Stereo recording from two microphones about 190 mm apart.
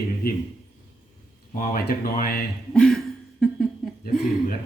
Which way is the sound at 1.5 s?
45° left (ahead or behind).